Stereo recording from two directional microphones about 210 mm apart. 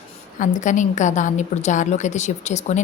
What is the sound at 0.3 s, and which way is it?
A woman's voice, 35° left (ahead or behind).